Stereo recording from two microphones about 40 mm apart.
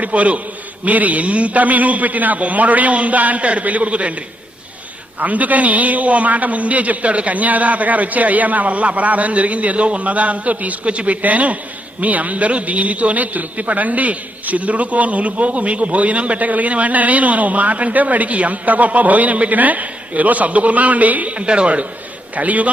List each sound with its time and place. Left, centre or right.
0.0 s a man's voice: right
5.2 s a man's voice: right